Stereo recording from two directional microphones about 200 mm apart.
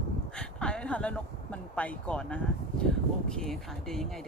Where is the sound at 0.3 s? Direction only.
5° left (ahead or behind).